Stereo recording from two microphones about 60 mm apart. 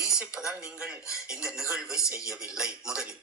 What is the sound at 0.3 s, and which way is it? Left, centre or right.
A man's voice, centre.